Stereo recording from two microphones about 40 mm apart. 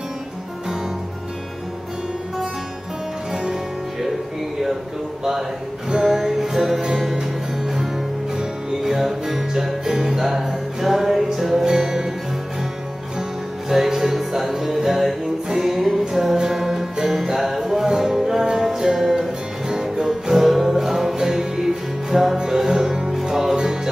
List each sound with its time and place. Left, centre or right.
5.9 s music: centre
13.7 s music: centre